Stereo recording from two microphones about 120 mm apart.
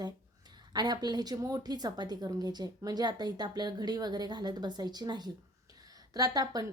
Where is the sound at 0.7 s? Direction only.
35° right (ahead or behind).